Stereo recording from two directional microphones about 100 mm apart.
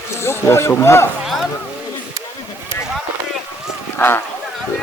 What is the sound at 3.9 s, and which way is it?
Speech, 20° left (ahead or behind).